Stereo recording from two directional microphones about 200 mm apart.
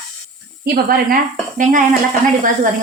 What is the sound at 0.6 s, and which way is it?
Speech, 50° right (ahead or behind).